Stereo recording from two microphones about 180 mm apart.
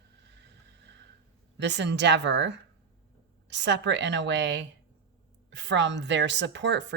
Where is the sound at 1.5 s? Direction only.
75° right (ahead or behind).